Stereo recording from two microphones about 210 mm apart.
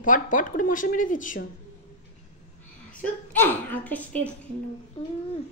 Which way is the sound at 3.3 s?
10° left (ahead or behind).